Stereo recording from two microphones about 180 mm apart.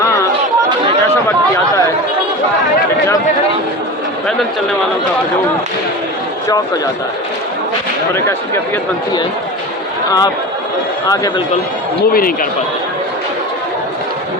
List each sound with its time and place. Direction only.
10.1 s speech: 20° left (ahead or behind)
12.1 s speech: 55° left (ahead or behind)